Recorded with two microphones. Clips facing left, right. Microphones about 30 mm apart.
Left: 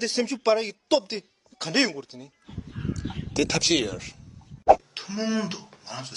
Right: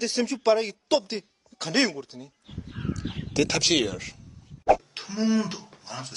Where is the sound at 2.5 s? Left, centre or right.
Right.